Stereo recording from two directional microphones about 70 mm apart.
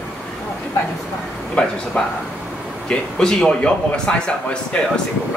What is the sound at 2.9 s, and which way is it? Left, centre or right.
A man's voice, centre.